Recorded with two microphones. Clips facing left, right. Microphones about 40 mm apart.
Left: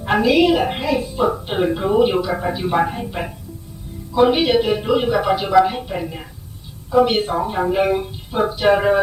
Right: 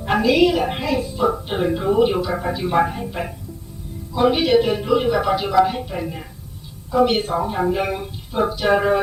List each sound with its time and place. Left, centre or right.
0.0 s a woman's voice: centre
1.1 s speech: left
4.1 s speech: centre